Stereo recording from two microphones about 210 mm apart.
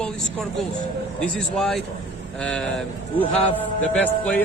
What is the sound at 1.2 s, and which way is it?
Speech, centre (ahead or behind).